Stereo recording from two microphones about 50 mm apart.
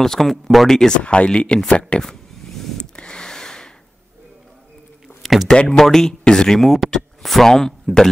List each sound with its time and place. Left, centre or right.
0.0 s speech: centre
1.0 s speech: left
2.0 s vehicle: centre
3.0 s a sound: centre
5.0 s a sound: centre
5.5 s speech: centre